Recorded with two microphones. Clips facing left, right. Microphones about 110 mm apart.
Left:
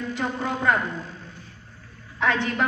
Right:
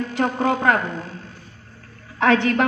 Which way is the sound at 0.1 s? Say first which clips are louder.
Right 8 dB; 85° right.